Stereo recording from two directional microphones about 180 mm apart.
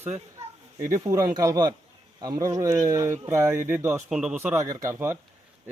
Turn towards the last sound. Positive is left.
turn(degrees=-15)  # may be behind; listen again after turning